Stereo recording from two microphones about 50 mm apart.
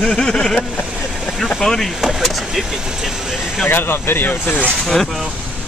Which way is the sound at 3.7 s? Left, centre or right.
Left.